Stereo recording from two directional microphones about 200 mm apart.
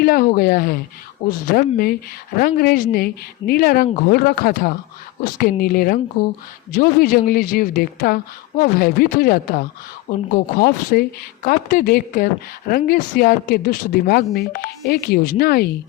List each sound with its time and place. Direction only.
0.0 s a woman's voice: 45° left (ahead or behind)